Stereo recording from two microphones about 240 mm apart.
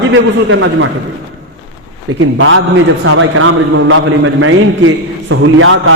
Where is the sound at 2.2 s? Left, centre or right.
Right.